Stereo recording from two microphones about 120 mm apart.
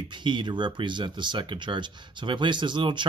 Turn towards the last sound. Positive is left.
turn(degrees=-40)  # may be behind; listen again after turning